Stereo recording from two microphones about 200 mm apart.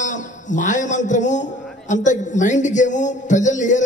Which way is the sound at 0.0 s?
40° left (ahead or behind).